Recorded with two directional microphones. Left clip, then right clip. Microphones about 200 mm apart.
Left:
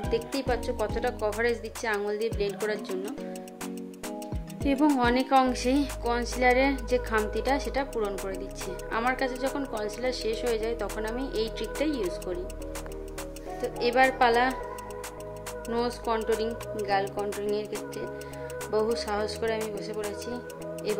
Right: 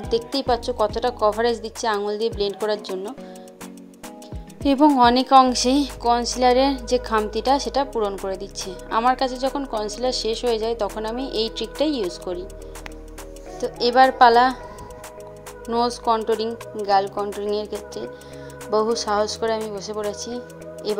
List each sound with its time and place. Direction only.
0.4 s a woman's voice: 20° right (ahead or behind)
4.9 s a woman's voice: 25° right (ahead or behind)
13.6 s a woman's voice: 20° right (ahead or behind)
15.7 s a woman's voice: 15° right (ahead or behind)